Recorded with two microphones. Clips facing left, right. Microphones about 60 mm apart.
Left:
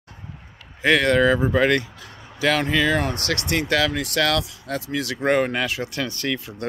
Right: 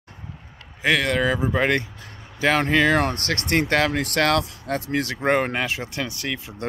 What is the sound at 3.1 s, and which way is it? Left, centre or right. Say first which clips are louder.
Speech: right 1 dB; right.